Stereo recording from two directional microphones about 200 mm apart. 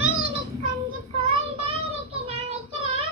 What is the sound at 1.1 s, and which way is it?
Child singing, 30° right (ahead or behind).